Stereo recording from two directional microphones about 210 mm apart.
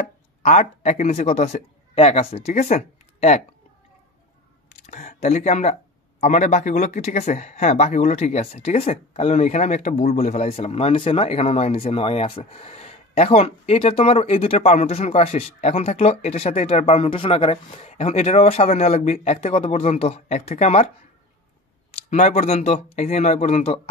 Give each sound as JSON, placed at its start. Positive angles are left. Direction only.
{"t": 0.4, "sound": "speech", "side_deg": 30}
{"t": 4.6, "sound": "speech", "side_deg": 35}
{"t": 21.9, "sound": "speech", "side_deg": 35}